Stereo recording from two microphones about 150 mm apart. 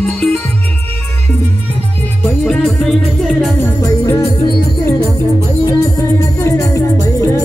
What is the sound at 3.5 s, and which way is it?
Music, 15° left (ahead or behind).